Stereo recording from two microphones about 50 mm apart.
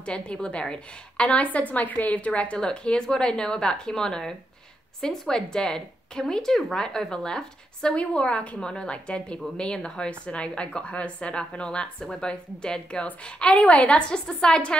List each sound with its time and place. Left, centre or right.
0.0 s a woman's voice: centre